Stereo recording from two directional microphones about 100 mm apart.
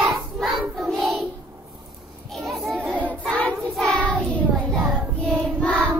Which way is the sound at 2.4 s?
Centre (ahead or behind).